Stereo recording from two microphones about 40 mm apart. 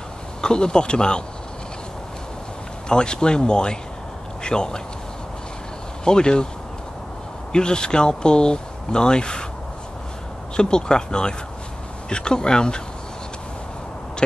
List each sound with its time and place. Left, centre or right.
0.4 s speech: left
2.9 s speech: left
6.0 s speech: left
7.5 s speech: left
10.5 s speech: left